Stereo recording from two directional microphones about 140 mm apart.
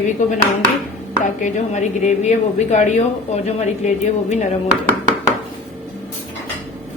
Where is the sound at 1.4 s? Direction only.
55° left (ahead or behind).